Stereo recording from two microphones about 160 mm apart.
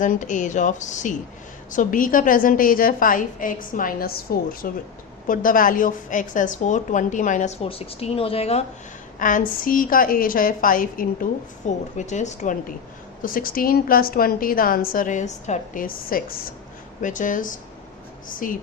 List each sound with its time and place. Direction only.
0.0 s a woman's voice: 55° left (ahead or behind)
7.6 s a woman's voice: 35° left (ahead or behind)
9.1 s a woman's voice: 55° left (ahead or behind)
13.2 s a woman's voice: 60° left (ahead or behind)